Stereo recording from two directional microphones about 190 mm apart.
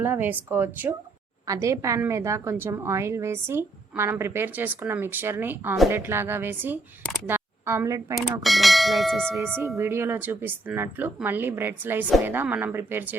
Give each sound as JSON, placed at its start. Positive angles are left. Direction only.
{"t": 0.0, "sound": "a woman's voice", "side_deg": -10}
{"t": 7.3, "sound": "a sound", "side_deg": -15}
{"t": 8.4, "sound": "bell", "side_deg": 0}
{"t": 9.6, "sound": "a woman's voice", "side_deg": -15}